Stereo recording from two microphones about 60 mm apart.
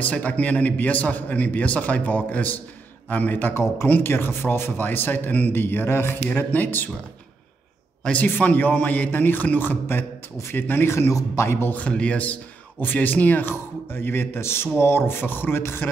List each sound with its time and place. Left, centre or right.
0.0 s a man's voice: left
3.5 s a man's voice: left
6.3 s a man's voice: left
8.0 s a man's voice: left
11.7 s a man's voice: left